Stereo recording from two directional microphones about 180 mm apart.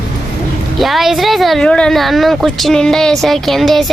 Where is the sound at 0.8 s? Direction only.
Centre (ahead or behind).